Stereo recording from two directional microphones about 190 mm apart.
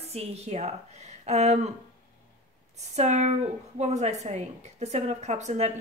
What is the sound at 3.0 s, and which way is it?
A woman's voice, 35° right (ahead or behind).